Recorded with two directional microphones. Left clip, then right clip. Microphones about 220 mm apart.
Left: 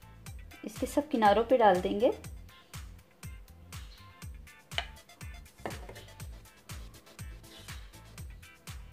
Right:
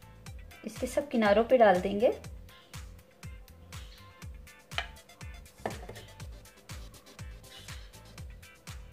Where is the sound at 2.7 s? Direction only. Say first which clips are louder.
Left 1 dB; centre (ahead or behind).